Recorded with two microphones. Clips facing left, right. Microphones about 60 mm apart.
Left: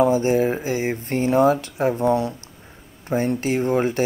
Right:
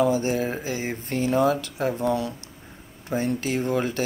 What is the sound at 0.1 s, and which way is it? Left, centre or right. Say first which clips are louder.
Speech: left 5 dB; left.